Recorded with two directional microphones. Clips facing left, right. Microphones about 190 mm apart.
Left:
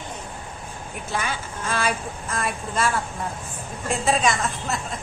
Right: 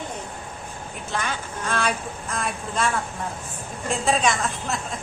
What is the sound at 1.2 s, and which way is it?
A woman's voice, centre (ahead or behind).